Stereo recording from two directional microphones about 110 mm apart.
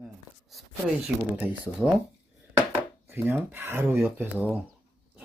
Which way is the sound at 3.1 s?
20° right (ahead or behind).